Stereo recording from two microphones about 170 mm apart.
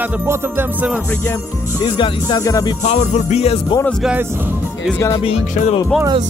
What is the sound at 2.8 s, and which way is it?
Music, 40° left (ahead or behind).